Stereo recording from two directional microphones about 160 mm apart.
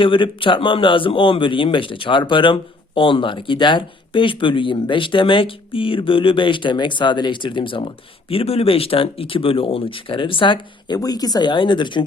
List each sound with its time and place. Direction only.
0.0 s a man's voice: 30° left (ahead or behind)